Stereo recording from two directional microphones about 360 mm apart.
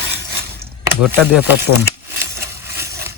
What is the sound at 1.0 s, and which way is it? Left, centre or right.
Speech, centre.